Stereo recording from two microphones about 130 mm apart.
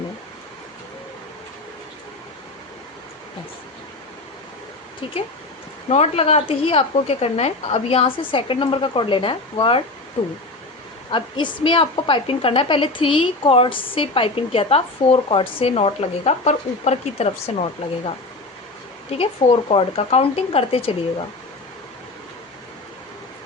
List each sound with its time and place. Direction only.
5.9 s a woman's voice: 55° left (ahead or behind)
19.1 s a woman's voice: 45° left (ahead or behind)